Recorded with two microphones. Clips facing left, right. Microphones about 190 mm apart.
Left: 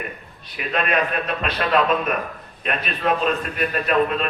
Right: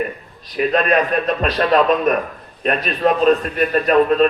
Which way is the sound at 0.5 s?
40° right (ahead or behind).